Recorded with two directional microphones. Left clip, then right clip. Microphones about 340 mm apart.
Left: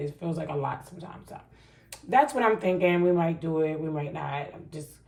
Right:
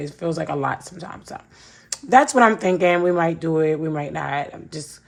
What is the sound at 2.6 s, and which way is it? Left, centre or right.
A woman's voice, right.